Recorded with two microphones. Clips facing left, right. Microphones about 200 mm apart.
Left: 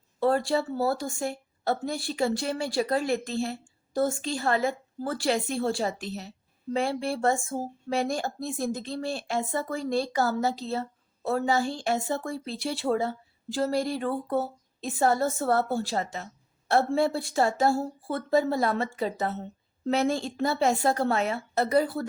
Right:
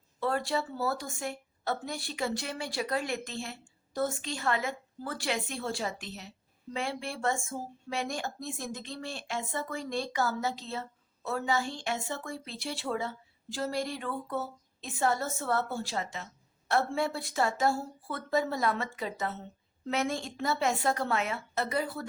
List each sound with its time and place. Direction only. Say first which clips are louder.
0.2 s speech: left 6 dB; 30° left (ahead or behind)